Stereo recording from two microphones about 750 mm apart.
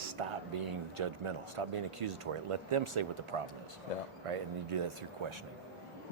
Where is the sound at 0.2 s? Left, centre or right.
Right.